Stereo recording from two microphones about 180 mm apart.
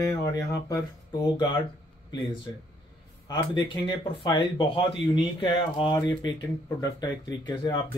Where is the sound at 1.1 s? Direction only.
25° left (ahead or behind).